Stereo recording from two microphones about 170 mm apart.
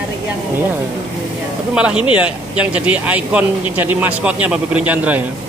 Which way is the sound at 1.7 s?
5° right (ahead or behind).